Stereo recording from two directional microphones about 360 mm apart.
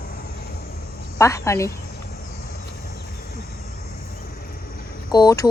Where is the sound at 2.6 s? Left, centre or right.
Left.